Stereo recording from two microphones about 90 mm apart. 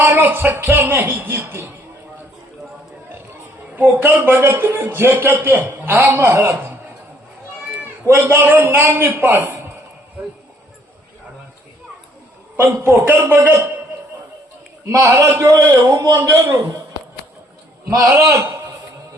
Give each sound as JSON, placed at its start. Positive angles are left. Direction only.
{"t": 0.0, "sound": "a man's voice", "side_deg": -25}
{"t": 3.8, "sound": "a man's voice", "side_deg": -20}
{"t": 8.0, "sound": "a man's voice", "side_deg": -25}
{"t": 12.5, "sound": "a man's voice", "side_deg": -20}
{"t": 14.8, "sound": "a man's voice", "side_deg": -30}
{"t": 18.1, "sound": "a man's voice", "side_deg": -35}